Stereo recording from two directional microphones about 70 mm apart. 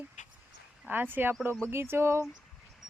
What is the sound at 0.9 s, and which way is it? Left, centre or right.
Speech, right.